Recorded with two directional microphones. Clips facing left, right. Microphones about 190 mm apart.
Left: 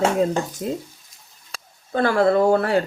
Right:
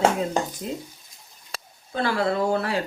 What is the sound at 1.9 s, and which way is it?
Speech, 50° left (ahead or behind).